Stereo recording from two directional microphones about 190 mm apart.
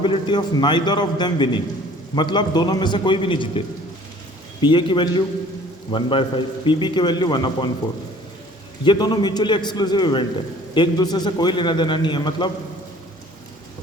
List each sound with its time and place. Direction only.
0.0 s a man's voice: 25° left (ahead or behind)
4.6 s a man's voice: 25° left (ahead or behind)
8.8 s a man's voice: 25° left (ahead or behind)